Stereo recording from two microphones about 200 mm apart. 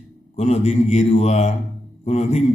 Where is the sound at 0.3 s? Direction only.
35° left (ahead or behind).